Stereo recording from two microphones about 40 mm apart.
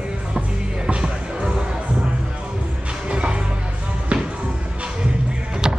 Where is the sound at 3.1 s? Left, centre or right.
Right.